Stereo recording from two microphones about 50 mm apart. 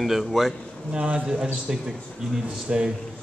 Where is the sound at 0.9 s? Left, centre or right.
Right.